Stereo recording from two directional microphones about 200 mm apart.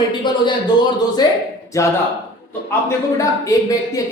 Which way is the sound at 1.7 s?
15° left (ahead or behind).